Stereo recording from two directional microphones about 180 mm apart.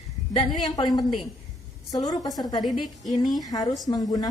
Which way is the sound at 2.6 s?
Centre (ahead or behind).